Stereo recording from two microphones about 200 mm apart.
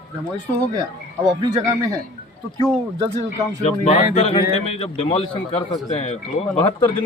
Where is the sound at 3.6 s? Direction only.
35° left (ahead or behind).